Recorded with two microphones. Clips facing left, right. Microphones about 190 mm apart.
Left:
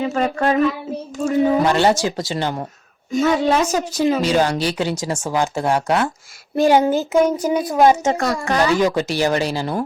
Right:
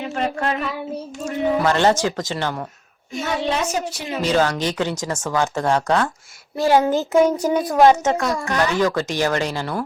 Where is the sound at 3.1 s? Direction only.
40° left (ahead or behind).